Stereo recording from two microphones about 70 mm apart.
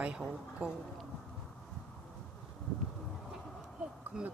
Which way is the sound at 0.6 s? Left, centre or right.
Right.